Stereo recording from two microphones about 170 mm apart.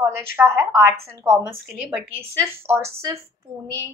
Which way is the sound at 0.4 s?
15° right (ahead or behind).